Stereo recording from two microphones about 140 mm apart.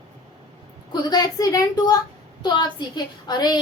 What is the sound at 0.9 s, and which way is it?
A woman's voice, 30° left (ahead or behind).